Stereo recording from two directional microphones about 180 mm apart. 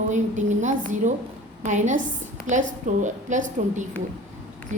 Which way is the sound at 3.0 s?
45° right (ahead or behind).